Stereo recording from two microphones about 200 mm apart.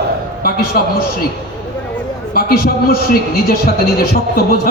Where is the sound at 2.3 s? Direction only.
50° left (ahead or behind).